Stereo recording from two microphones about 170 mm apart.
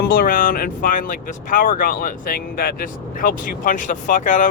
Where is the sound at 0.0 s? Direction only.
60° left (ahead or behind).